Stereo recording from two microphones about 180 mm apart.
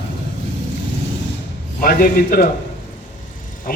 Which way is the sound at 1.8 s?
50° left (ahead or behind).